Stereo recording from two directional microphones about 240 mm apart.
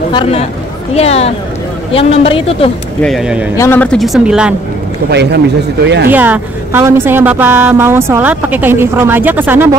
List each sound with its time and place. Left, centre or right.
0.1 s speech: left
3.0 s speech: centre
3.5 s speech: centre
5.1 s a man's voice: right
6.1 s a woman's voice: centre